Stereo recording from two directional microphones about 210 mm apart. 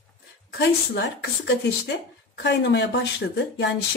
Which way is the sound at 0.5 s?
55° left (ahead or behind).